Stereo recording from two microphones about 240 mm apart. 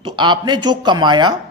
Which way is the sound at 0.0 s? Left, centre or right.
Centre.